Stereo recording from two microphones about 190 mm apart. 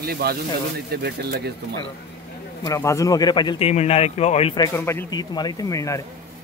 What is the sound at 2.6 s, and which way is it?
Speech, 15° left (ahead or behind).